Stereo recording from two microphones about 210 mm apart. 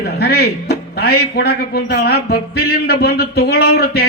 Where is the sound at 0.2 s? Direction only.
50° left (ahead or behind).